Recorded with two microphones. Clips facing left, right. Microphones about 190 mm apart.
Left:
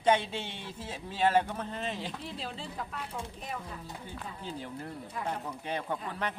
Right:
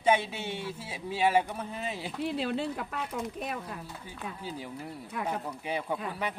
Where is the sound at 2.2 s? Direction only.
65° right (ahead or behind).